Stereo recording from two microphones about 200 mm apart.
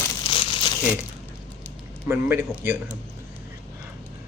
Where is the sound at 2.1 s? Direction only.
10° right (ahead or behind).